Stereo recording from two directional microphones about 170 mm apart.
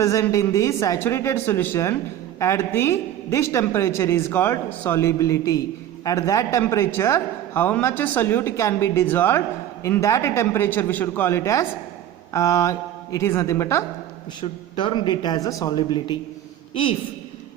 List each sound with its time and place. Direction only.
0.0 s a man's voice: 20° left (ahead or behind)
14.8 s speech: 25° left (ahead or behind)